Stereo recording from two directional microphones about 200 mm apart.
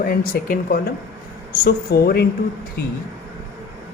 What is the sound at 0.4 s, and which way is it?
Speech, 45° left (ahead or behind).